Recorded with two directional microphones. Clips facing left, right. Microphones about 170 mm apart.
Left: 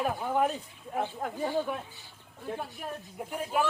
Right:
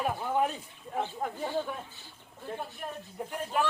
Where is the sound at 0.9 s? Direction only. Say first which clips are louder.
Left 1 dB; 5° left (ahead or behind).